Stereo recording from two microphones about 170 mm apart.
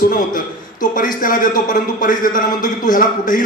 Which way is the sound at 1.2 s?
55° left (ahead or behind).